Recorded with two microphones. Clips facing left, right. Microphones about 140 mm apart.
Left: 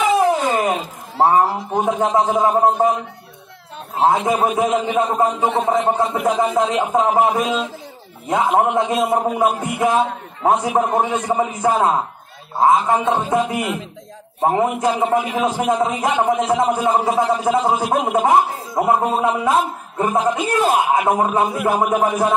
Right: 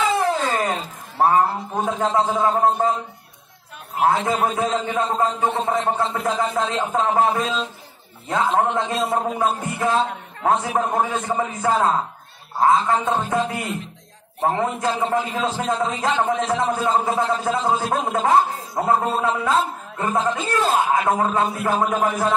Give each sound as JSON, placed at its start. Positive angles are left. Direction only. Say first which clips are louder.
{"t": 0.0, "sound": "cat", "louder": "left 4 dB", "side_deg": 15}
{"t": 1.3, "sound": "a man's voice", "louder": "left 3 dB", "side_deg": 15}
{"t": 5.4, "sound": "a man's voice", "louder": "left 3 dB", "side_deg": 90}
{"t": 5.7, "sound": "a man's voice", "louder": "left 4 dB", "side_deg": 20}